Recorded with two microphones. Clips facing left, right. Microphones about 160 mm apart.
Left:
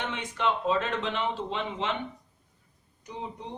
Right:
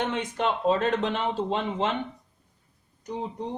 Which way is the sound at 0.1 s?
45° right (ahead or behind).